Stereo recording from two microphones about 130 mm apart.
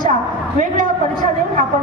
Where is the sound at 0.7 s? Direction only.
90° right.